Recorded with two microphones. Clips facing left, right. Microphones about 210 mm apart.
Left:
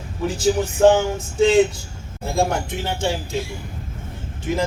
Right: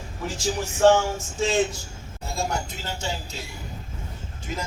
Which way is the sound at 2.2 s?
55° left (ahead or behind).